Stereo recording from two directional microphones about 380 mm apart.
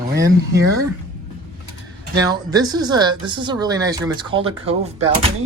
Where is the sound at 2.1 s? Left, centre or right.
Centre.